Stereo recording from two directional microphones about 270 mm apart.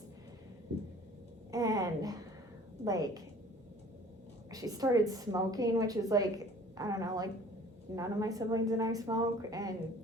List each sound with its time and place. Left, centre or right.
1.5 s speech: centre
4.5 s speech: centre